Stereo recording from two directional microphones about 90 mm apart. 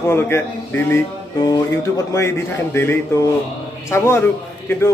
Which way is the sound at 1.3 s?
45° left (ahead or behind).